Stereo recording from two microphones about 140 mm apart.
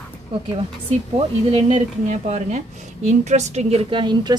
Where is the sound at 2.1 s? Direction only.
55° right (ahead or behind).